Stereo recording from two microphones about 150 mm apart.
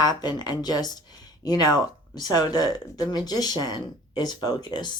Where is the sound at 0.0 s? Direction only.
25° left (ahead or behind).